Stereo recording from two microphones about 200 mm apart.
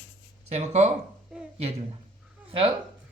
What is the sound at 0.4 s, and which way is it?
Speech, 35° right (ahead or behind).